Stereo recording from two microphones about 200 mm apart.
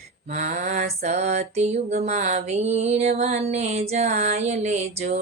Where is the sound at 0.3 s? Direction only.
40° right (ahead or behind).